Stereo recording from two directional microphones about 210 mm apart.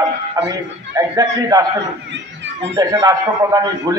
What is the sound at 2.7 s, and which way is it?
A man's voice, 20° right (ahead or behind).